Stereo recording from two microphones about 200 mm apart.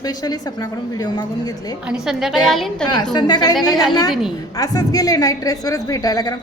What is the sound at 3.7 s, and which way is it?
Speech, centre (ahead or behind).